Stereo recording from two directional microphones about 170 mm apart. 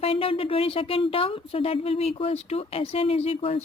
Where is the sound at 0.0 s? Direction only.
35° left (ahead or behind).